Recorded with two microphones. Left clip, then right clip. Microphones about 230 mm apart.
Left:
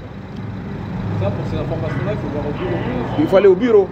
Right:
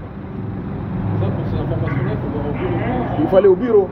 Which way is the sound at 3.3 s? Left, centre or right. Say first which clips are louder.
Left 1 dB; left.